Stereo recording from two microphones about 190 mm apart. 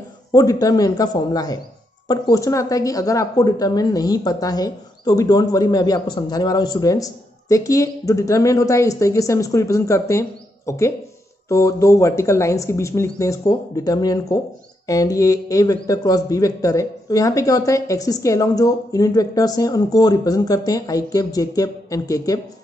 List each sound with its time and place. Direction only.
0.3 s a man's voice: 20° left (ahead or behind)